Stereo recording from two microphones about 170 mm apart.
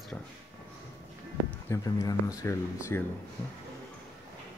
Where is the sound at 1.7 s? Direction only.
20° left (ahead or behind).